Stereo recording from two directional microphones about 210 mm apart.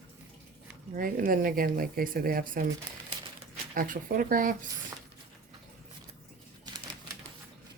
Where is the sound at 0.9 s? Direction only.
40° right (ahead or behind).